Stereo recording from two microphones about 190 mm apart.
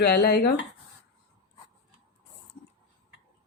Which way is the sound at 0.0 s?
55° left (ahead or behind).